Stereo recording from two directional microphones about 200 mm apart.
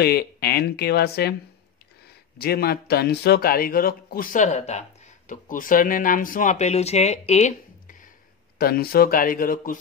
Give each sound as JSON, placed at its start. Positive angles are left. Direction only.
{"t": 0.0, "sound": "speech", "side_deg": 50}
{"t": 2.3, "sound": "speech", "side_deg": 50}
{"t": 8.5, "sound": "speech", "side_deg": 50}